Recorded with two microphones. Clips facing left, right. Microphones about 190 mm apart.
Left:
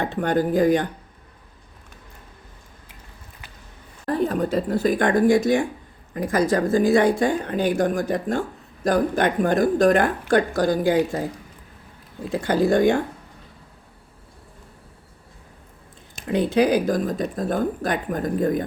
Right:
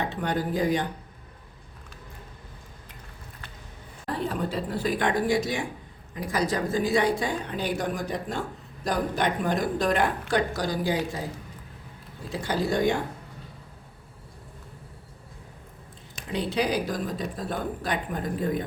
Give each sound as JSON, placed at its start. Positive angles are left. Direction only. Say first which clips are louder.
{"t": 0.0, "sound": "speech", "louder": "left 6 dB", "side_deg": 50}
{"t": 4.1, "sound": "speech", "louder": "left 7 dB", "side_deg": 45}
{"t": 12.3, "sound": "speech", "louder": "left 8 dB", "side_deg": 55}
{"t": 16.2, "sound": "speech", "louder": "left 8 dB", "side_deg": 50}